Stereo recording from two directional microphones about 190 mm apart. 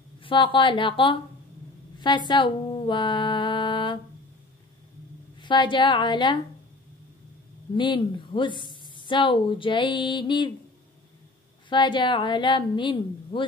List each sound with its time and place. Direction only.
0.2 s speech: 25° left (ahead or behind)
5.4 s speech: 25° left (ahead or behind)
7.7 s speech: 25° left (ahead or behind)
11.7 s speech: 25° left (ahead or behind)